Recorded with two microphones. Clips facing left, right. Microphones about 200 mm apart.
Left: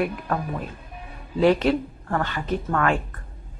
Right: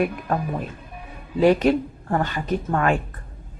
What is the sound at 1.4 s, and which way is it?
Speech, 15° right (ahead or behind).